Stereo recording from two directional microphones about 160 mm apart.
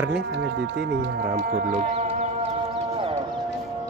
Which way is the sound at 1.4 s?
65° right (ahead or behind).